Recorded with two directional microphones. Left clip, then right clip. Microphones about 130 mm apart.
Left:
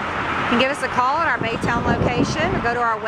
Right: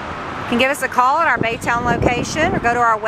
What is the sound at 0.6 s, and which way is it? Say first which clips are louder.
Speech: right 8 dB; 15° right (ahead or behind).